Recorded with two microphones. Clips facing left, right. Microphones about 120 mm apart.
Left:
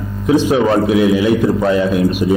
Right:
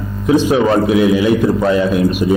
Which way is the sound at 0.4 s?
20° right (ahead or behind).